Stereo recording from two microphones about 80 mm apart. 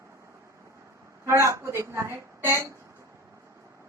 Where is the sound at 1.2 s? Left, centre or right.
Right.